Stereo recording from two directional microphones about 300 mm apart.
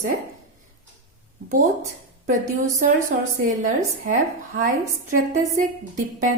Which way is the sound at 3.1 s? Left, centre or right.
Right.